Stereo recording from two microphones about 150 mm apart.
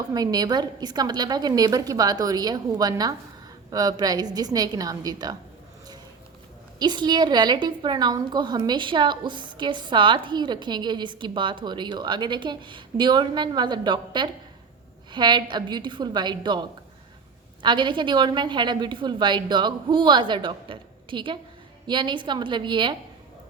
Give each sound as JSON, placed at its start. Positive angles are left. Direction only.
{"t": 0.1, "sound": "a woman's voice", "side_deg": -25}
{"t": 6.7, "sound": "a woman's voice", "side_deg": -30}